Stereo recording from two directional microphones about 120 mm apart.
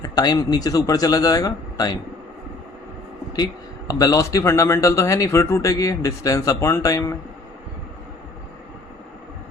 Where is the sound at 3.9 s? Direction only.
30° left (ahead or behind).